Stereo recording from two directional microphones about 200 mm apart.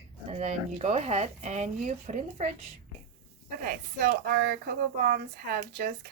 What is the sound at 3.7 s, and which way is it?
Speech, 45° right (ahead or behind).